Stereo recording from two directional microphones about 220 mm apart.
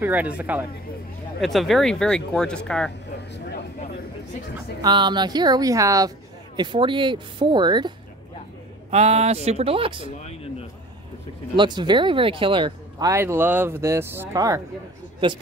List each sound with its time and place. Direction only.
0.0 s speech: 5° right (ahead or behind)
4.8 s speech: 20° right (ahead or behind)
8.9 s speech: 30° right (ahead or behind)
11.5 s speech: 20° right (ahead or behind)